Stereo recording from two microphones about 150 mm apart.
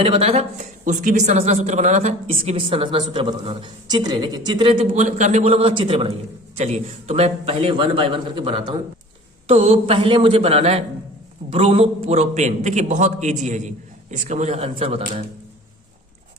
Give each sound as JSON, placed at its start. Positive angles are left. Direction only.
{"t": 0.0, "sound": "a woman's voice", "side_deg": -40}
{"t": 0.9, "sound": "a man's voice", "side_deg": -55}
{"t": 4.9, "sound": "a woman's voice", "side_deg": -50}
{"t": 6.6, "sound": "a woman's voice", "side_deg": -45}